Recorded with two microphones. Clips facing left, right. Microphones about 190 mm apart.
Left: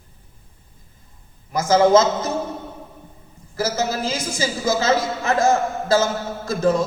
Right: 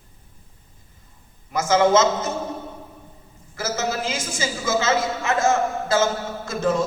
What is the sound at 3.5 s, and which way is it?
A man's voice, 35° left (ahead or behind).